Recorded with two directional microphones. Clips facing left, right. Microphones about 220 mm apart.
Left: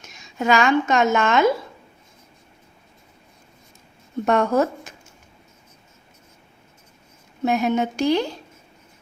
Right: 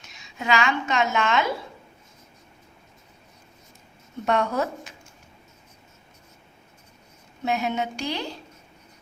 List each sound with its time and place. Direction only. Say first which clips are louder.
0.0 s a woman's voice: left 7 dB; 45° left (ahead or behind)
4.3 s speech: left 5 dB; 45° left (ahead or behind)
7.4 s speech: left 6 dB; 50° left (ahead or behind)